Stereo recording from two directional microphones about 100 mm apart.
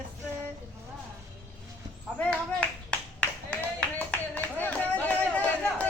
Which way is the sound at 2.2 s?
10° left (ahead or behind).